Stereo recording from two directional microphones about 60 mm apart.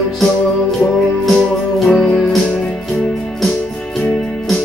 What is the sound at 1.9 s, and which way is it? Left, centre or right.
Music, centre.